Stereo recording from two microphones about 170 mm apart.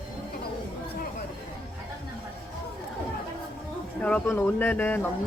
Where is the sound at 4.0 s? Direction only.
5° left (ahead or behind).